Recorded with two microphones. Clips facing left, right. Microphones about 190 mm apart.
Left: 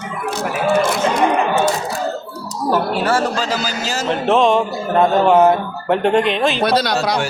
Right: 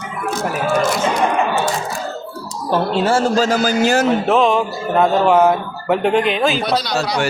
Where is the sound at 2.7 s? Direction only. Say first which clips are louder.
Right 2 dB; 25° right (ahead or behind).